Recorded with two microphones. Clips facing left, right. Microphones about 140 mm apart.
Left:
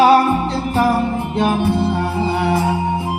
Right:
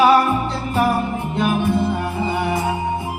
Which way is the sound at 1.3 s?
85° left.